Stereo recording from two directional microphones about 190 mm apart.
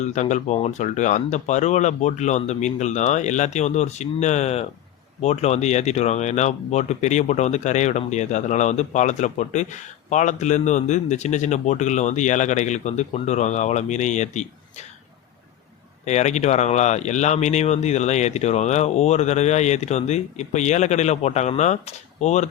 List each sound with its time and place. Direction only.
0.0 s speech: 40° left (ahead or behind)
16.0 s speech: 35° left (ahead or behind)